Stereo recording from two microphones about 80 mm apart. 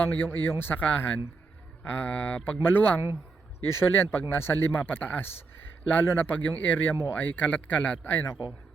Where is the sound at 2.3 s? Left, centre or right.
Left.